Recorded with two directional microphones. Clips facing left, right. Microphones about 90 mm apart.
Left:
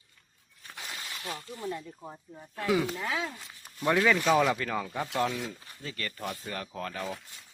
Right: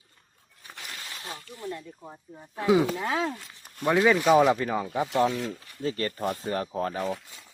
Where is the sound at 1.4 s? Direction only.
20° left (ahead or behind).